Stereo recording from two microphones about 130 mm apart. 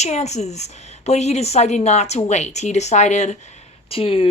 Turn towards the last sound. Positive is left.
turn(degrees=45)  # may be behind; listen again after turning